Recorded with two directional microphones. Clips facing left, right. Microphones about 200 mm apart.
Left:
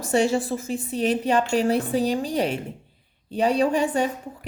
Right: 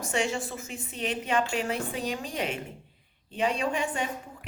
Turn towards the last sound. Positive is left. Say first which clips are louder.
# left 8 dB
turn(degrees=35)  # may be behind; listen again after turning